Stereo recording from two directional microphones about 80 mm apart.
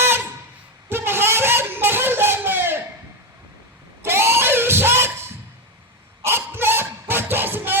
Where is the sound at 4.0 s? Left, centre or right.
Right.